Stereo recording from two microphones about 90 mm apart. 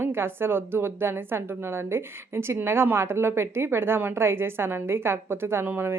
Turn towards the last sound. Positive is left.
turn(degrees=-20)  # may be behind; listen again after turning